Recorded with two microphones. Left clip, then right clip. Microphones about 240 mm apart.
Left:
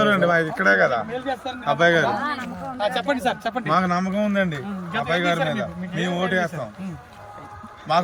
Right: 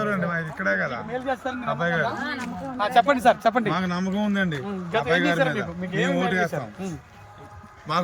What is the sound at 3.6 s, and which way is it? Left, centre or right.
Speech, left.